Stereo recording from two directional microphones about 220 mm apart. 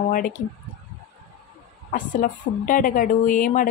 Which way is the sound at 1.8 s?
35° left (ahead or behind).